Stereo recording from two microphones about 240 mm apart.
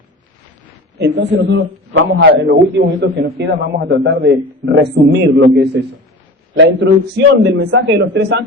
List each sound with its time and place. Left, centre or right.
0.9 s a man's voice: right